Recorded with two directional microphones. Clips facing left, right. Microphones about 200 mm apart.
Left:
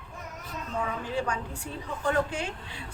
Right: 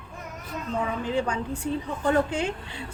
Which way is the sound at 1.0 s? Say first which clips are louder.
Right 4 dB; 25° right (ahead or behind).